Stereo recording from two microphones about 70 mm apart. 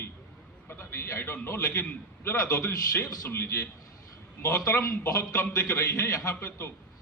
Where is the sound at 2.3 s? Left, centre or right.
Left.